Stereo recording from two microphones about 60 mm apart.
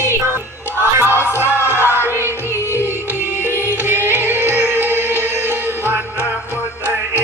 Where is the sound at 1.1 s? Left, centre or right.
Left.